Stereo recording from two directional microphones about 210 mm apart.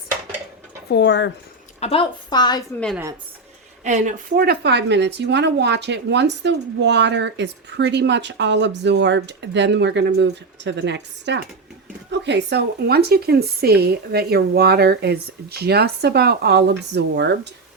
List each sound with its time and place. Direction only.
0.9 s speech: 55° left (ahead or behind)
1.8 s a woman's voice: 25° left (ahead or behind)
3.8 s speech: 35° right (ahead or behind); by 17.5 s 55° right (ahead or behind)